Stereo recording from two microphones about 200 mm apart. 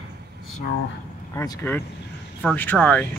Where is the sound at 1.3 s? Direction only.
10° left (ahead or behind).